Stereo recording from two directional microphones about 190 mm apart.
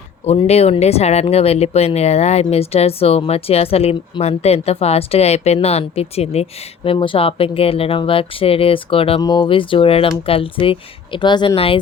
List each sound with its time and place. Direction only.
0.3 s speech: 35° left (ahead or behind)